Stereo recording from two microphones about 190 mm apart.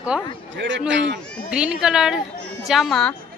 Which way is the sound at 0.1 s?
5° right (ahead or behind).